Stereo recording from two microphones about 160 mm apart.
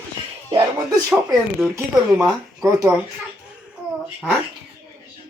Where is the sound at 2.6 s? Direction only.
20° right (ahead or behind).